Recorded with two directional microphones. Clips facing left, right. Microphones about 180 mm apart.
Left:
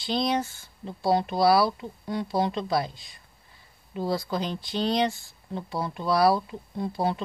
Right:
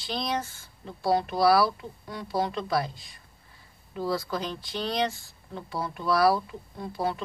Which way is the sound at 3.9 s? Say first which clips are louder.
Left 1 dB; 20° left (ahead or behind).